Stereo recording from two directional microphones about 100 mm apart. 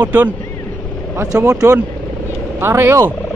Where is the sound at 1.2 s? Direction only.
35° right (ahead or behind).